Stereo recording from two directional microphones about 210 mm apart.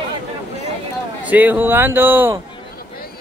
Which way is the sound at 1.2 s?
10° right (ahead or behind).